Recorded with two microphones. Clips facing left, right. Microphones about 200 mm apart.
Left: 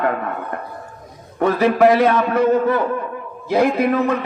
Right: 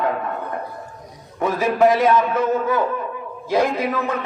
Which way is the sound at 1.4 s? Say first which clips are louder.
Left 3 dB; 65° left (ahead or behind).